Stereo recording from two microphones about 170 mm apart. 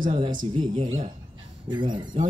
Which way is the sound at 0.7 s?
35° right (ahead or behind).